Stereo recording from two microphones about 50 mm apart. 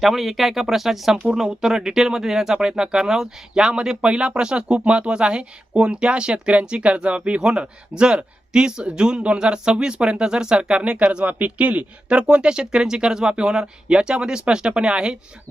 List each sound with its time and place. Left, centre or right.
0.0 s speech: centre